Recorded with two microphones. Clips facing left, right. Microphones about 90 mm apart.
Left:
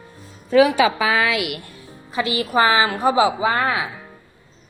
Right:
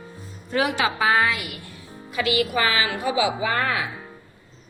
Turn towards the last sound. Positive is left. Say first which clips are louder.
# left 4 dB
turn(degrees=25)  # may be behind; listen again after turning